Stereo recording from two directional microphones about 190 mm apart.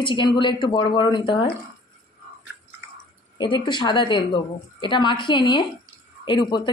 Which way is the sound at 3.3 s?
25° left (ahead or behind).